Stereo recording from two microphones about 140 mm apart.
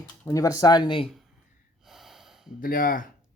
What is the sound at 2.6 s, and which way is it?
Speech, 90° left.